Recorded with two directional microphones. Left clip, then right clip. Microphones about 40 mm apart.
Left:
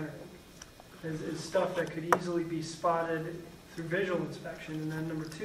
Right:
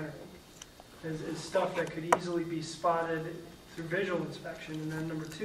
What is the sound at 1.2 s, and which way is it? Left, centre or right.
Speech, right.